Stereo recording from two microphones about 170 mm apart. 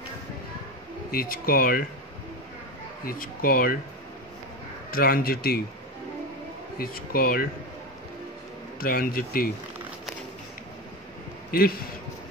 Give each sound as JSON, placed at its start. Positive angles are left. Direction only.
{"t": 1.1, "sound": "a man's voice", "side_deg": 60}
{"t": 3.1, "sound": "a man's voice", "side_deg": 60}
{"t": 4.9, "sound": "a man's voice", "side_deg": 60}
{"t": 6.8, "sound": "a man's voice", "side_deg": 60}
{"t": 8.7, "sound": "a man's voice", "side_deg": 60}